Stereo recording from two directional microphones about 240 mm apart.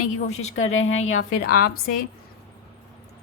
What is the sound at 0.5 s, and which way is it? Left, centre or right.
A woman's voice, left.